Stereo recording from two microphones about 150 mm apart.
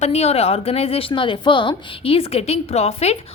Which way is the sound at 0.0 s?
45° left (ahead or behind).